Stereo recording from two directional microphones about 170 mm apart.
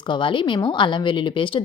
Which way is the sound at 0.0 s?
30° left (ahead or behind).